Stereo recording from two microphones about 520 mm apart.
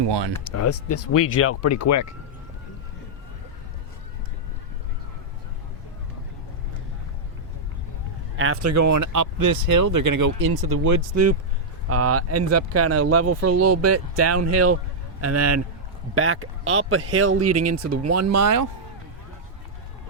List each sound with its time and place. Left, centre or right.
0.0 s speech: right
0.5 s speech: left
8.4 s speech: right